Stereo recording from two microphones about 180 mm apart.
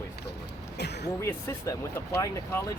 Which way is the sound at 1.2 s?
15° left (ahead or behind).